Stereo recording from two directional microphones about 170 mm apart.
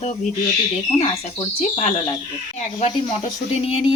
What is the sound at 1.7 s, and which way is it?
Speech, 40° left (ahead or behind).